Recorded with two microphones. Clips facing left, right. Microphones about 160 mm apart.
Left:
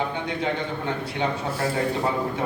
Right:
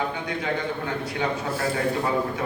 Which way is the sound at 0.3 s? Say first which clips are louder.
Left 1 dB; 30° left (ahead or behind).